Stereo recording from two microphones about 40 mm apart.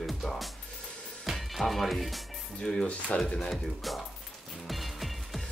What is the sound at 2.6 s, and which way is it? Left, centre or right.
Speech, centre.